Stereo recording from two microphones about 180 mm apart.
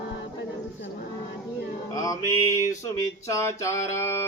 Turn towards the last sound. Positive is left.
turn(degrees=15)  # may be behind; listen again after turning